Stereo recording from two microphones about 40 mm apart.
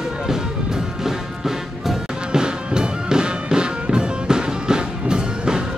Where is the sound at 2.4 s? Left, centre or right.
Right.